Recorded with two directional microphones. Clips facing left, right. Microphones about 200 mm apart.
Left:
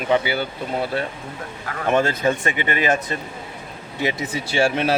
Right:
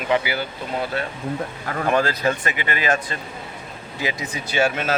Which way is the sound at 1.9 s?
25° left (ahead or behind).